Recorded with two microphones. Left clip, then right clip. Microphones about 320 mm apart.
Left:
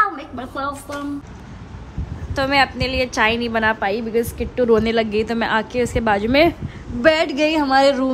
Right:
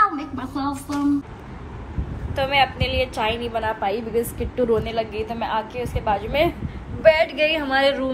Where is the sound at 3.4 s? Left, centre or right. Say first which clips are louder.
Left 5 dB; left.